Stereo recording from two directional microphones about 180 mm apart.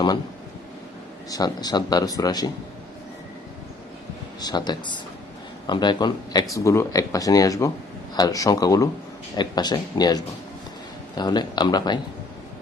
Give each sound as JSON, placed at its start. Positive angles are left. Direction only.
{"t": 1.3, "sound": "speech", "side_deg": 20}
{"t": 4.4, "sound": "speech", "side_deg": 25}